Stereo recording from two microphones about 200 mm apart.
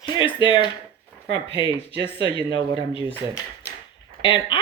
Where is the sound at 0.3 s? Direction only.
25° left (ahead or behind).